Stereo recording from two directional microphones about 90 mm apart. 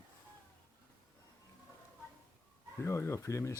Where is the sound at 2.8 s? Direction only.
30° left (ahead or behind).